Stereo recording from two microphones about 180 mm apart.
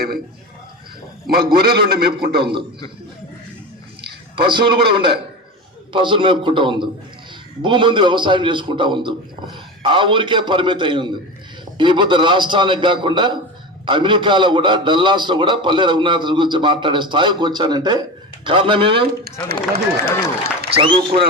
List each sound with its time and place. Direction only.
1.3 s speech: 60° right (ahead or behind)
4.4 s a man's voice: 25° right (ahead or behind)
19.2 s speech: 60° right (ahead or behind)
20.7 s a man's voice: 30° right (ahead or behind)